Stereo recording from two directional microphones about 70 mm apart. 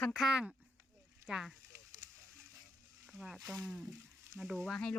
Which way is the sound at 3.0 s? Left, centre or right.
Centre.